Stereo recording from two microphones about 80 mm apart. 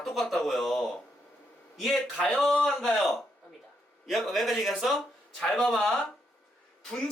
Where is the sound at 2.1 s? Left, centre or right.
Centre.